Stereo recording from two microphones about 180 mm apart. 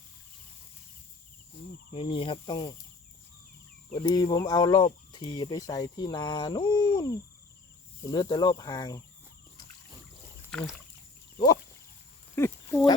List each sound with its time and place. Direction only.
1.9 s speech: 30° left (ahead or behind)
3.9 s speech: 20° left (ahead or behind)
10.5 s speech: 5° left (ahead or behind)
12.4 s speech: 10° left (ahead or behind)